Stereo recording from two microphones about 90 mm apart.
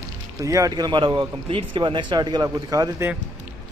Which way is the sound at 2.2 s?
50° right (ahead or behind).